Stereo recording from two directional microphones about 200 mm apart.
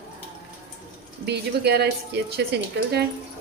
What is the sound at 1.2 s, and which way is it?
Speech, 55° right (ahead or behind).